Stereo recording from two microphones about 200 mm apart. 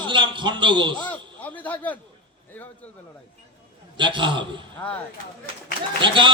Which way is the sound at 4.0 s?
25° right (ahead or behind).